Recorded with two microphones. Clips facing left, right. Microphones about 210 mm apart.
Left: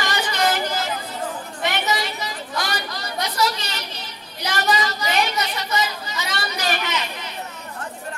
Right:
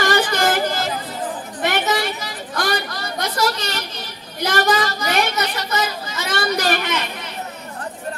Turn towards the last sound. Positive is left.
turn(degrees=-55)  # may be behind; listen again after turning